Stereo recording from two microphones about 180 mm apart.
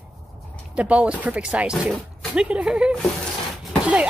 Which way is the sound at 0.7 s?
5° right (ahead or behind).